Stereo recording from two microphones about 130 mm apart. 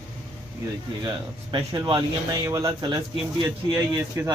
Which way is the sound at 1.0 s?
30° right (ahead or behind).